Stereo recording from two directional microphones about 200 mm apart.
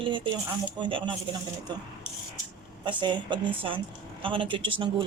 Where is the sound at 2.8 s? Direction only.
25° right (ahead or behind).